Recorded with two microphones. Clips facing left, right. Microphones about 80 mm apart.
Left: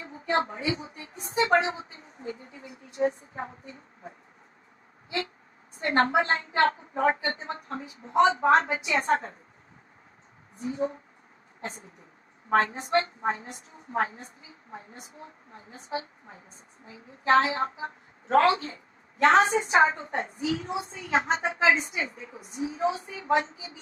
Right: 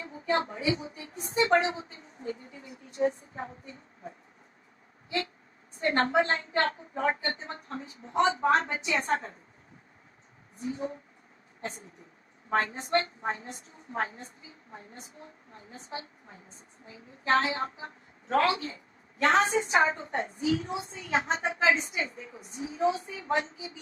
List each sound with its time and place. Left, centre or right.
0.0 s a woman's voice: left
5.7 s a woman's voice: left
10.6 s a woman's voice: left
12.5 s a woman's voice: left